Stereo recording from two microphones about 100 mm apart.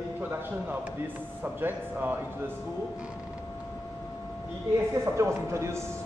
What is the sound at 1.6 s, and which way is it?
Speech, 20° right (ahead or behind).